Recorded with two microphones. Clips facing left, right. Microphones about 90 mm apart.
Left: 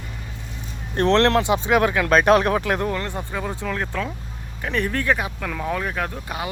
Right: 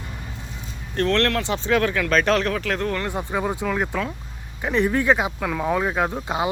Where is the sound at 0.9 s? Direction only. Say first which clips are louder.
Left 4 dB; 25° left (ahead or behind).